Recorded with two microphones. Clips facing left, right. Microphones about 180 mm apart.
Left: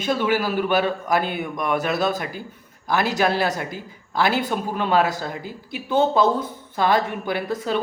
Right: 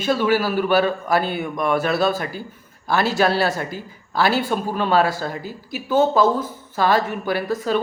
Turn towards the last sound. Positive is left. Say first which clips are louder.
# right 3 dB
turn(degrees=20)  # may be behind; listen again after turning